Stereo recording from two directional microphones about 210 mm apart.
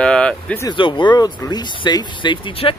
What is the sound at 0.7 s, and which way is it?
Speech, 25° left (ahead or behind).